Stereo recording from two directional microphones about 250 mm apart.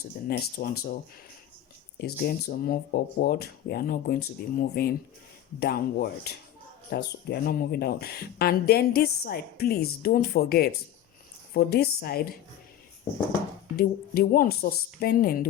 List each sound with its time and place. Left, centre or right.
0.3 s speech: left
2.0 s speech: left
13.7 s speech: left